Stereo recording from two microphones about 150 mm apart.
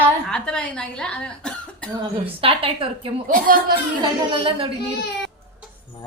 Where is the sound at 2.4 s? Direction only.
40° right (ahead or behind).